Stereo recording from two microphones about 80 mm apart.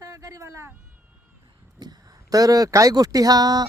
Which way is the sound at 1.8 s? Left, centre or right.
Right.